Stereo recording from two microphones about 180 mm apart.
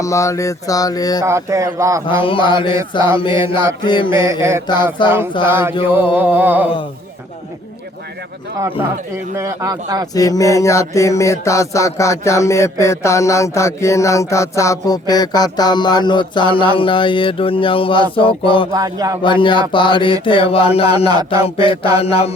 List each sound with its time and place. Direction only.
0.0 s mantra: 15° left (ahead or behind)
1.2 s speech: 15° right (ahead or behind)
2.0 s mantra: 30° left (ahead or behind)
3.5 s speech: 10° right (ahead or behind)
3.8 s mantra: 25° left (ahead or behind)
4.2 s speech: 15° right (ahead or behind)
9.4 s a man's voice: 20° right (ahead or behind)
10.2 s mantra: 20° left (ahead or behind)
18.7 s a man's voice: 20° right (ahead or behind)
19.2 s mantra: 25° left (ahead or behind)
20.2 s a sound: 30° left (ahead or behind)
21.4 s mantra: 30° left (ahead or behind)
21.9 s a sound: 35° left (ahead or behind)